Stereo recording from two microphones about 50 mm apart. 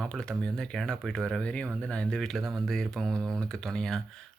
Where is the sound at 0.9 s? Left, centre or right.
Centre.